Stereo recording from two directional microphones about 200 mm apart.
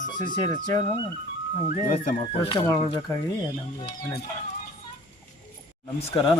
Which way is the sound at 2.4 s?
20° left (ahead or behind).